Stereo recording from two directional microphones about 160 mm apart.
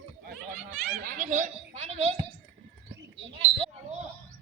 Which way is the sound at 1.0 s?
55° right (ahead or behind).